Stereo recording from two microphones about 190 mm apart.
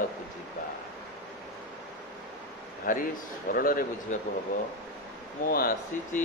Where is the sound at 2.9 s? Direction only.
45° left (ahead or behind).